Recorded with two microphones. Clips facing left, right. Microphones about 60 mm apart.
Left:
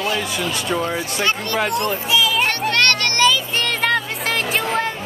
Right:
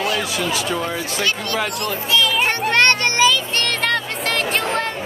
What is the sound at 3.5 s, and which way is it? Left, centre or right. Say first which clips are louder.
Music: left 1 dB; centre.